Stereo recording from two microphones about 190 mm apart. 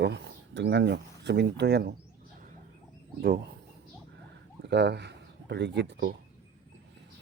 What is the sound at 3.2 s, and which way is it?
Speech, 50° right (ahead or behind).